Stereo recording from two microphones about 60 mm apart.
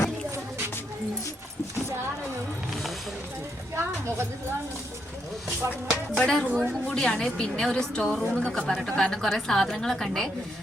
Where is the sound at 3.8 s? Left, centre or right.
Right.